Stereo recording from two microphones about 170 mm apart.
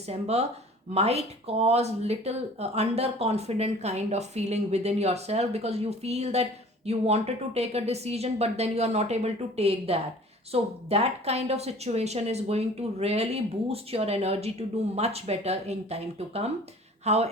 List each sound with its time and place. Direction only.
0.1 s speech: 40° right (ahead or behind)